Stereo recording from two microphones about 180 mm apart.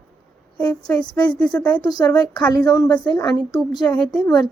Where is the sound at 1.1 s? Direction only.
25° left (ahead or behind).